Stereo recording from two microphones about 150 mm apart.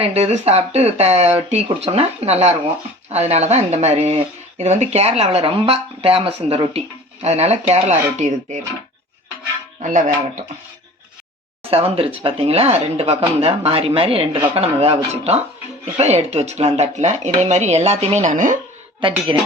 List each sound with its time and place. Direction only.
0.0 s speech: 45° right (ahead or behind)
9.8 s speech: 55° right (ahead or behind)
11.7 s speech: 40° right (ahead or behind); by 18.5 s 55° right (ahead or behind)
19.3 s speech: 30° right (ahead or behind)